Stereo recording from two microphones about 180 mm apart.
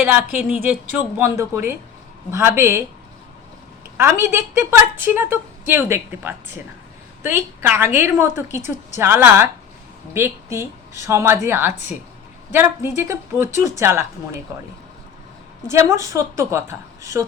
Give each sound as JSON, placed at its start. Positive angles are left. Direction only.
{"t": 0.0, "sound": "a woman's voice", "side_deg": -5}
{"t": 3.9, "sound": "a woman's voice", "side_deg": -15}